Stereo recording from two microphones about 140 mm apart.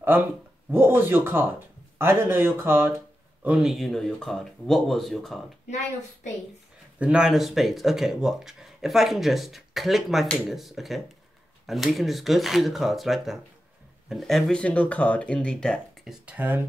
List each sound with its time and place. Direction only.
0.7 s speech: 15° right (ahead or behind)
3.4 s speech: 5° right (ahead or behind)
7.0 s speech: 5° right (ahead or behind)